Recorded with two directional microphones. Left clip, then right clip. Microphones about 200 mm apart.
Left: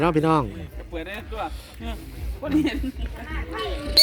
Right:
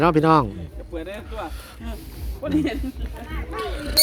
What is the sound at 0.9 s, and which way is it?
Speech, 45° left (ahead or behind).